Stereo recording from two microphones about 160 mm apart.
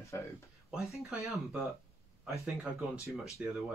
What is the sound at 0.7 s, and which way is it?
Speech, 5° right (ahead or behind).